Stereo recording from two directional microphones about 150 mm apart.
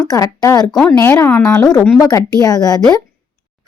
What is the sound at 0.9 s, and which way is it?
A woman's voice, 20° left (ahead or behind).